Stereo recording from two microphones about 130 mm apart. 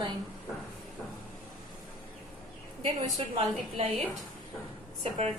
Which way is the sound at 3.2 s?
45° right (ahead or behind).